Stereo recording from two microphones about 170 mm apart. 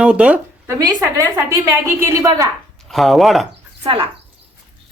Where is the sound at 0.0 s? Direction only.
5° right (ahead or behind).